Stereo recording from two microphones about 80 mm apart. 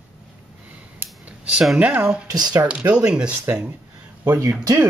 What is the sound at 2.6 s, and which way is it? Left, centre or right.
Speech, centre.